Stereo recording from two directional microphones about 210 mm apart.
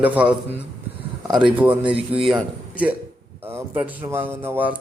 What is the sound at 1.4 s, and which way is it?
A man's voice, 5° right (ahead or behind).